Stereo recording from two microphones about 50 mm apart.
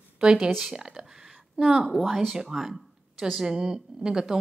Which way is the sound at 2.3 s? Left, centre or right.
Centre.